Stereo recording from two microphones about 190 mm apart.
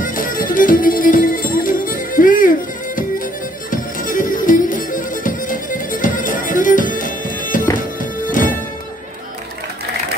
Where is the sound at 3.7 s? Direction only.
45° left (ahead or behind).